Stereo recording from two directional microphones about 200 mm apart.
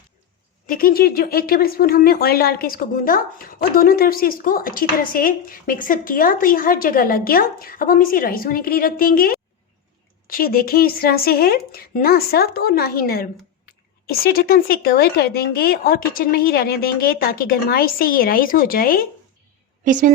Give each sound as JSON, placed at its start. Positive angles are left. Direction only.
{"t": 0.7, "sound": "speech", "side_deg": 45}
{"t": 19.8, "sound": "a woman's voice", "side_deg": -40}